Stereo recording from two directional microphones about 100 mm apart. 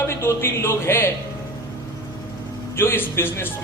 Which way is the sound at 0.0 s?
25° left (ahead or behind).